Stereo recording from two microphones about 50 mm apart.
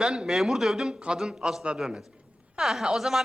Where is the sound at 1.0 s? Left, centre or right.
Centre.